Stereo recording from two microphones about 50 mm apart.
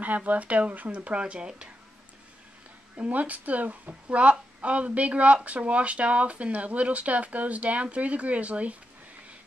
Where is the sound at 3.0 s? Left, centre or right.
Right.